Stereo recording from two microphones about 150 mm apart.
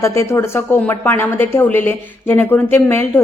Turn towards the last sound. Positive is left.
turn(degrees=15)  # may be behind; listen again after turning